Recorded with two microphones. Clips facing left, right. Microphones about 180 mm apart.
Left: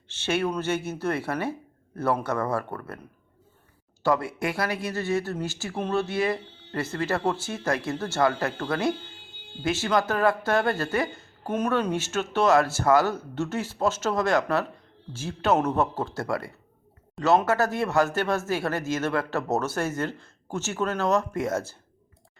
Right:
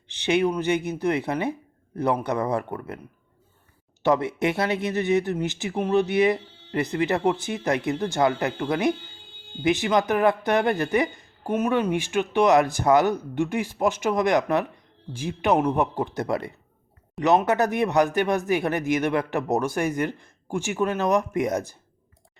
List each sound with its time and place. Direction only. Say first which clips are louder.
0.1 s speech: right 4 dB; 15° right (ahead or behind)
4.0 s speech: right 3 dB; 20° right (ahead or behind)